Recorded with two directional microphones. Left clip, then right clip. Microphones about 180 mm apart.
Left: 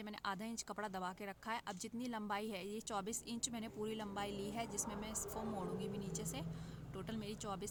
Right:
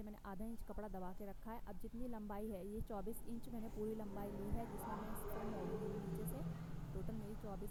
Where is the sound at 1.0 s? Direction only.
40° right (ahead or behind).